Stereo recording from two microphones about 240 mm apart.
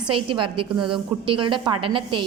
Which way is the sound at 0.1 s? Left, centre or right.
Right.